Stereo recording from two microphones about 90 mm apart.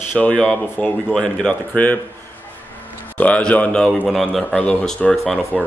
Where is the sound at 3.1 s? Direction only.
15° left (ahead or behind).